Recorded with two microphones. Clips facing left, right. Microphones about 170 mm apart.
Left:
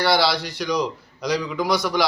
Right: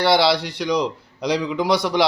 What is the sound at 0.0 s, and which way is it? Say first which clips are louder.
A man's voice: right 3 dB; 25° right (ahead or behind).